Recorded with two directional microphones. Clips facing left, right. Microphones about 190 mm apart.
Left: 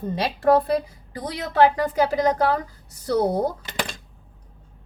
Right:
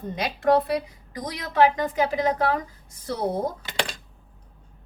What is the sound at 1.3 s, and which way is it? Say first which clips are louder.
Speech: left 2 dB; 35° left (ahead or behind).